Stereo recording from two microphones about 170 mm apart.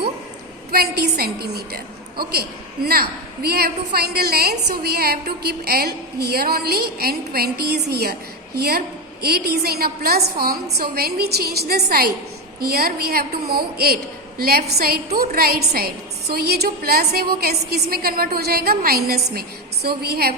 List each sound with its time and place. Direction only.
0.7 s a woman's voice: 65° right (ahead or behind)